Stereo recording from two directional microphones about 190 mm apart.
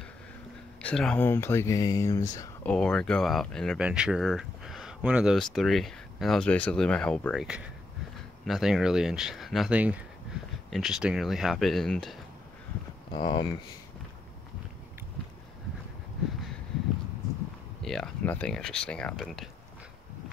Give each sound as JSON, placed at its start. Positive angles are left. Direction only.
{"t": 0.8, "sound": "speech", "side_deg": 5}
{"t": 2.6, "sound": "speech", "side_deg": 5}
{"t": 13.1, "sound": "speech", "side_deg": 25}
{"t": 17.8, "sound": "speech", "side_deg": 0}